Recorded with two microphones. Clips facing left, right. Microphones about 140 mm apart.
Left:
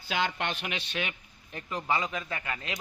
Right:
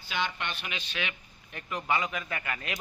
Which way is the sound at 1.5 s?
30° left (ahead or behind).